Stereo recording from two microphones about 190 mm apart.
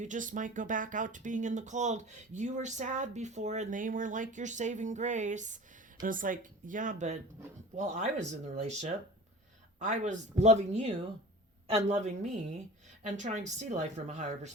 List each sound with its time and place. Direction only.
0.0 s speech: 40° right (ahead or behind)